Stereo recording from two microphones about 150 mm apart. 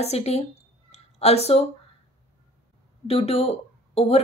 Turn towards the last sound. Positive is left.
turn(degrees=40)  # may be behind; listen again after turning